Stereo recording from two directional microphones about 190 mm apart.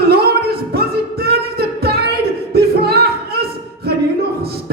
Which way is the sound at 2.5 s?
55° right (ahead or behind).